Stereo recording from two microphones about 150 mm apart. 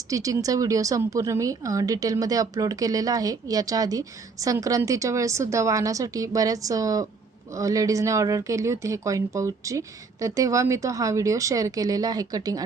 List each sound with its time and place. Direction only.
0.1 s a woman's voice: 25° right (ahead or behind)